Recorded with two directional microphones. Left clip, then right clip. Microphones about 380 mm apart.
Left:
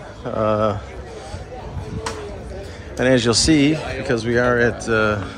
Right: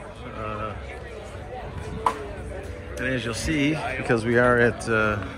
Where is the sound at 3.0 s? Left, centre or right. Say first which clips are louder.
Left 12 dB; centre.